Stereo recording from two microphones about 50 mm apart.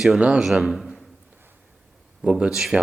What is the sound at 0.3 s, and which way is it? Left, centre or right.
Speech, centre.